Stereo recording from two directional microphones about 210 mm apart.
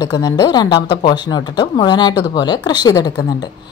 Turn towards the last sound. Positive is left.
turn(degrees=20)  # may be behind; listen again after turning